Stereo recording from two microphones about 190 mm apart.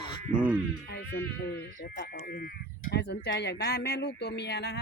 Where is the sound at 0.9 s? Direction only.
55° left (ahead or behind).